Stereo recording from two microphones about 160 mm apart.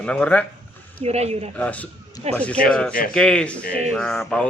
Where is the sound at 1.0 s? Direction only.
40° right (ahead or behind).